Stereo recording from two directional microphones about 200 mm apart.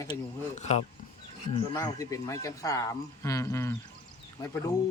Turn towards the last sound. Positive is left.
turn(degrees=15)  # may be behind; listen again after turning